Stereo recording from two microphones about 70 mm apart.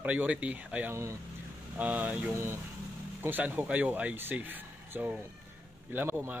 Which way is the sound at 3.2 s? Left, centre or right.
Right.